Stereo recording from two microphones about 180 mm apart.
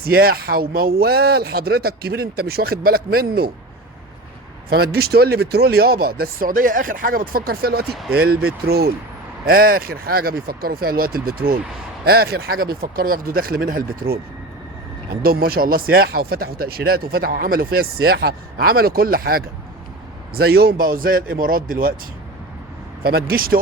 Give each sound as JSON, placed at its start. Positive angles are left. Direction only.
{"t": 0.0, "sound": "speech", "side_deg": -55}
{"t": 4.7, "sound": "speech", "side_deg": -60}
{"t": 15.2, "sound": "speech", "side_deg": -55}
{"t": 23.0, "sound": "speech", "side_deg": -60}